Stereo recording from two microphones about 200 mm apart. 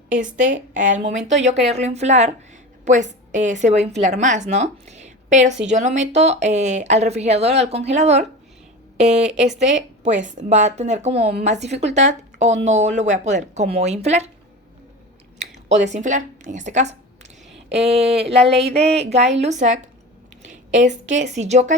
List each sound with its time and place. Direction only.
0.1 s speech: 40° right (ahead or behind)
9.0 s a woman's voice: 5° right (ahead or behind)
9.6 s speech: 35° right (ahead or behind)
15.4 s speech: 35° right (ahead or behind)
18.2 s a sound: 30° right (ahead or behind)
18.7 s a woman's voice: 30° right (ahead or behind)